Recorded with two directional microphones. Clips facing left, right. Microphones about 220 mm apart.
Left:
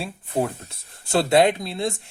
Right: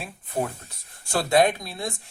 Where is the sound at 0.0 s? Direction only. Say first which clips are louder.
Left 4 dB; 30° left (ahead or behind).